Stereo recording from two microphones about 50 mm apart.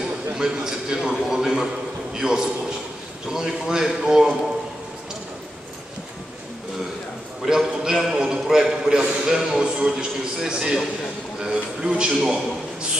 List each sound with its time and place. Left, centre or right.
0.0 s a man's voice: centre
7.4 s a man's voice: centre